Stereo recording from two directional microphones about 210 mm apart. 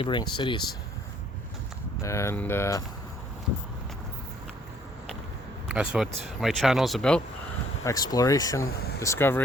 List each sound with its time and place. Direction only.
0.0 s speech: 20° left (ahead or behind)
2.0 s speech: 15° left (ahead or behind)
5.6 s speech: 5° right (ahead or behind)
7.9 s speech: 15° left (ahead or behind)
8.7 s speech: 50° left (ahead or behind)
9.0 s speech: 10° left (ahead or behind)